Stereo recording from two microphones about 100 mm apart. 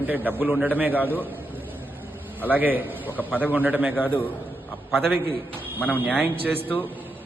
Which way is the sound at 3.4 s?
15° right (ahead or behind).